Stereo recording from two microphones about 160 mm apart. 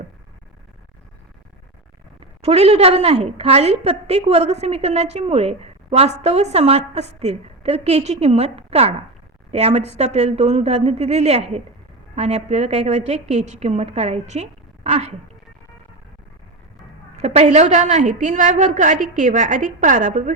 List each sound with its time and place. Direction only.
2.4 s a woman's voice: 40° right (ahead or behind)
14.8 s a sound: 45° right (ahead or behind)
17.2 s a woman's voice: 45° right (ahead or behind)